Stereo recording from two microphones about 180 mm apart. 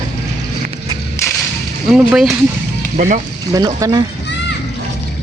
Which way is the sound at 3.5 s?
20° right (ahead or behind).